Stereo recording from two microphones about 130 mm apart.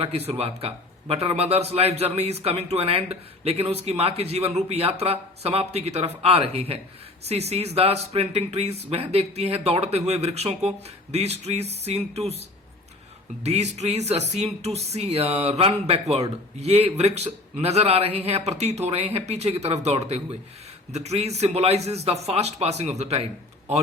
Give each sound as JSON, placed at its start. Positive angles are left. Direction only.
{"t": 0.3, "sound": "a man's voice", "side_deg": -50}